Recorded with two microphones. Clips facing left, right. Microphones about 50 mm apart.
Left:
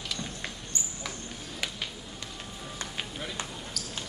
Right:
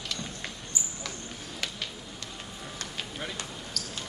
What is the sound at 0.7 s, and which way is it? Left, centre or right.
Mouse, centre.